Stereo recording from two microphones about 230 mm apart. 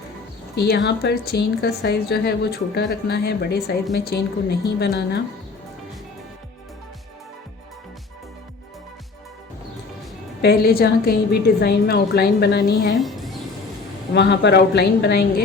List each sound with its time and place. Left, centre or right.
0.5 s a woman's voice: left
10.4 s a woman's voice: left
13.0 s music: centre
14.1 s a woman's voice: left